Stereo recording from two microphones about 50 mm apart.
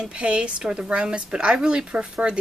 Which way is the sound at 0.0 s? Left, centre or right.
Right.